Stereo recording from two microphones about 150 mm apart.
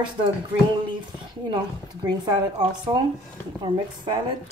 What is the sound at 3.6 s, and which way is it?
Speech, 35° right (ahead or behind).